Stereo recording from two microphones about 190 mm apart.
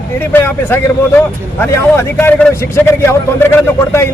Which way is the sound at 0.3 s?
10° left (ahead or behind).